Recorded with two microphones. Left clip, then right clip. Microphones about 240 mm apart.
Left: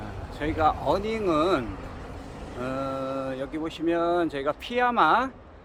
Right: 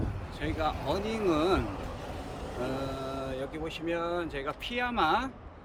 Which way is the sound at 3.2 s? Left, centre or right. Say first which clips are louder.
Left 5 dB; centre.